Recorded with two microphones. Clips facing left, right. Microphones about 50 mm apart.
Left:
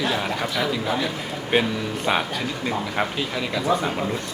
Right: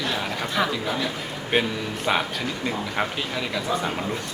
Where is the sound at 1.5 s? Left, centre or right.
Centre.